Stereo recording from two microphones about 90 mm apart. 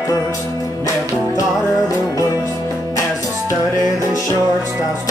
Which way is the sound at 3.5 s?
45° right (ahead or behind).